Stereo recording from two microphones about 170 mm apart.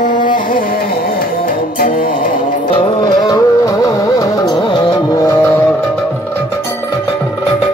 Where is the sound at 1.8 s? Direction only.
55° left (ahead or behind).